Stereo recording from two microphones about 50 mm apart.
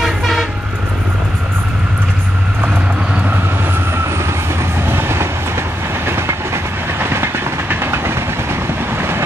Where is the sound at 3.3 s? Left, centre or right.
Right.